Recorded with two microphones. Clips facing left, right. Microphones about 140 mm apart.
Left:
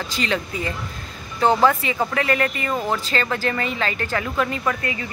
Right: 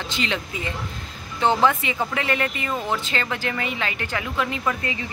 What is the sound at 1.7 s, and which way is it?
A woman's voice, 20° right (ahead or behind).